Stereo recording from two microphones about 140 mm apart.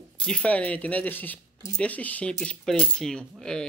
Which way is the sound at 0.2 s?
5° left (ahead or behind).